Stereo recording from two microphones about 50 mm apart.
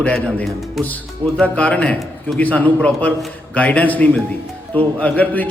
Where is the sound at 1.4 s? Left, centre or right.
Left.